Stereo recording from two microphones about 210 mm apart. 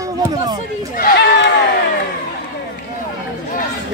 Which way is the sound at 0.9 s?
45° left (ahead or behind).